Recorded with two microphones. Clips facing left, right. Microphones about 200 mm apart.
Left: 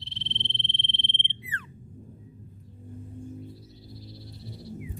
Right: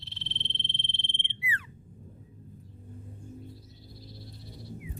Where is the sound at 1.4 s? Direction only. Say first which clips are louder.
Right 6 dB; 10° right (ahead or behind).